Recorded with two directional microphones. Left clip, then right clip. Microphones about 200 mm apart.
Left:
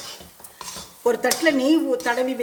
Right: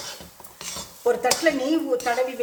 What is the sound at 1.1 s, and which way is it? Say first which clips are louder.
Speech: left 1 dB; 40° left (ahead or behind).